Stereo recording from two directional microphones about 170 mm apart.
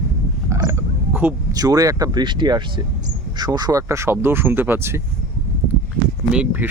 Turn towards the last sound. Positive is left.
turn(degrees=-10)  # may be behind; listen again after turning